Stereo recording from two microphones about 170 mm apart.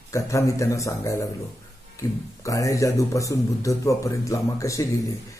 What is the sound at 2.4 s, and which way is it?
Speech, 20° left (ahead or behind).